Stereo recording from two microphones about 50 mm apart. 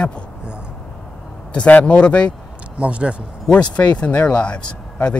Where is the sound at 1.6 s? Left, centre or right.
Left.